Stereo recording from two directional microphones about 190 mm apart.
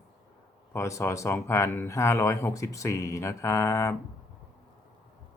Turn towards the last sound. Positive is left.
turn(degrees=15)  # may be behind; listen again after turning